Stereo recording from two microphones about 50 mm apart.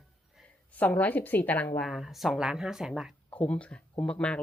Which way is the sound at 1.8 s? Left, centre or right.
Centre.